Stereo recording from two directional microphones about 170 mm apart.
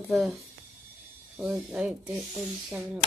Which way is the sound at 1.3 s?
10° right (ahead or behind).